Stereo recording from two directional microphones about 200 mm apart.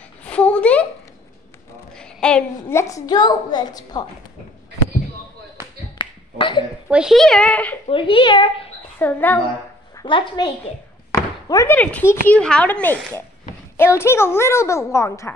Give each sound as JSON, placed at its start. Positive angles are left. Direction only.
{"t": 0.2, "sound": "a sound", "side_deg": 5}
{"t": 2.0, "sound": "a woman's voice", "side_deg": 5}
{"t": 5.9, "sound": "finger snapping", "side_deg": 25}
{"t": 6.9, "sound": "a woman's voice", "side_deg": -5}
{"t": 7.9, "sound": "a woman's voice", "side_deg": 25}
{"t": 8.9, "sound": "a woman's voice", "side_deg": 10}
{"t": 9.9, "sound": "a woman's voice", "side_deg": 25}